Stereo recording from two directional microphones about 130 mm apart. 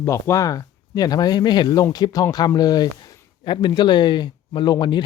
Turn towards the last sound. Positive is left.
turn(degrees=35)  # may be behind; listen again after turning